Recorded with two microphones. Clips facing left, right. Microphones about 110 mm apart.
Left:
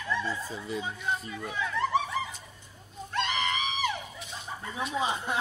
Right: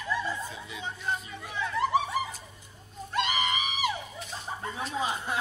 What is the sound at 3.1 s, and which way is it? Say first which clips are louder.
Music: right 1 dB; 10° right (ahead or behind).